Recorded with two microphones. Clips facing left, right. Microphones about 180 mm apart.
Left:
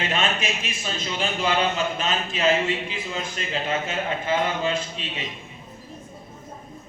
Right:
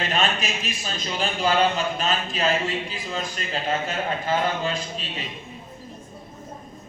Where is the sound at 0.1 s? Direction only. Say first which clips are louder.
Even; 35° right (ahead or behind).